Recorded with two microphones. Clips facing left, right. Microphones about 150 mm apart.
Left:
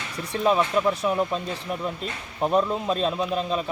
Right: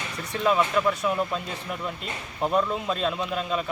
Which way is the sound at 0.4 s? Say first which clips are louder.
Left 1 dB; 25° left (ahead or behind).